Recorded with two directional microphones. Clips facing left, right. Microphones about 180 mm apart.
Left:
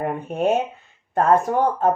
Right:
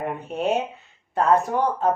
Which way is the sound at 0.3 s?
50° left (ahead or behind).